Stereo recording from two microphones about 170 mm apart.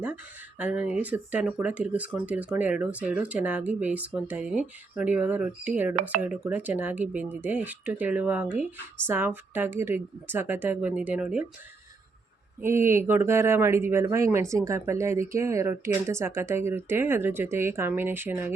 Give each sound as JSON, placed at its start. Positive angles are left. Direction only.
{"t": 0.6, "sound": "speech", "side_deg": -10}
{"t": 12.6, "sound": "speech", "side_deg": -15}